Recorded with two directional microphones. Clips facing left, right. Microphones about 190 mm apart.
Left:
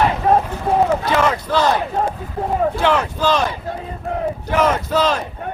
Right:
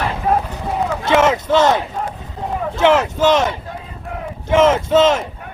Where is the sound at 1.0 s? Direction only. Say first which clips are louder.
Right 3 dB; 20° right (ahead or behind).